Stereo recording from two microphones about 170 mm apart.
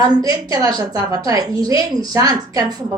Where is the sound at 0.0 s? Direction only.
20° right (ahead or behind).